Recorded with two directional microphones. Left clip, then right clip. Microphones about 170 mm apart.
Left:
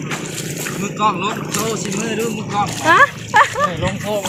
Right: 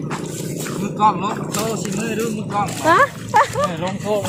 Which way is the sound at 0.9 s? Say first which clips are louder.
Right 1 dB; 70° right (ahead or behind).